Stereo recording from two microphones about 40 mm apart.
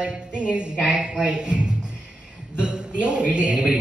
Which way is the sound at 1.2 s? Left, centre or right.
Right.